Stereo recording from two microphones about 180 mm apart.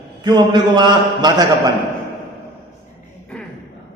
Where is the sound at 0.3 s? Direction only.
25° right (ahead or behind).